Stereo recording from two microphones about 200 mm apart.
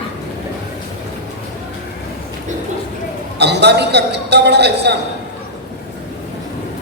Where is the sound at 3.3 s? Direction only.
55° right (ahead or behind).